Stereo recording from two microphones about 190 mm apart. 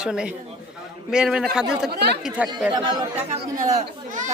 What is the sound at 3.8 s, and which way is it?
Speech, 40° right (ahead or behind).